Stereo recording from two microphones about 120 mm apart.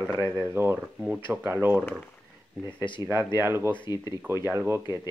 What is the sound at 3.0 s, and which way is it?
Speech, 25° right (ahead or behind).